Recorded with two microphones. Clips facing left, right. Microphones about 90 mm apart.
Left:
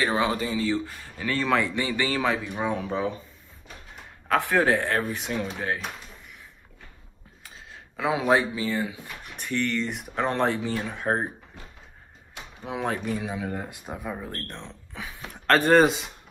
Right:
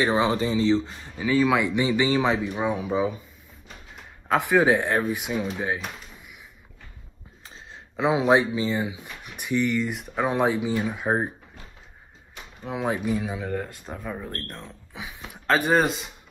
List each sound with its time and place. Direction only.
0.0 s speech: 25° right (ahead or behind)
4.3 s speech: 15° right (ahead or behind)
7.4 s speech: 30° right (ahead or behind); by 11.2 s 5° right (ahead or behind)
12.6 s speech: centre (ahead or behind)
12.9 s speech: 10° right (ahead or behind)
13.2 s speech: centre (ahead or behind)
13.6 s speech: 10° left (ahead or behind)